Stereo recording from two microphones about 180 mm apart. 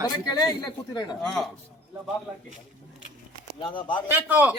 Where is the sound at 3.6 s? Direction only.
30° left (ahead or behind).